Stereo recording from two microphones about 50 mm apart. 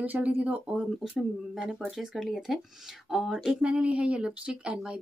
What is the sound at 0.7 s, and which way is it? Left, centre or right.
Speech, centre.